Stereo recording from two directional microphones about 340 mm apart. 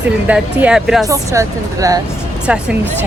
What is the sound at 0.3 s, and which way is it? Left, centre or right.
A woman's voice, centre.